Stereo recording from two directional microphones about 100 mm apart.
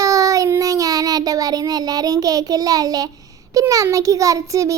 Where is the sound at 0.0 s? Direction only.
35° right (ahead or behind).